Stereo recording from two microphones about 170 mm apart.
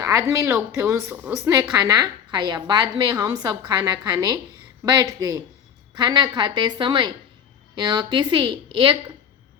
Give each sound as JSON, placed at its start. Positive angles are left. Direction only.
{"t": 0.0, "sound": "a woman's voice", "side_deg": -15}